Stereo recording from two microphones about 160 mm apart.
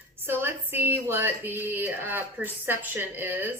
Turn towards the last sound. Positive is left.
turn(degrees=-10)  # may be behind; listen again after turning